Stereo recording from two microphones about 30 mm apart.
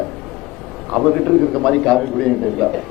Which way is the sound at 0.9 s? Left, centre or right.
Centre.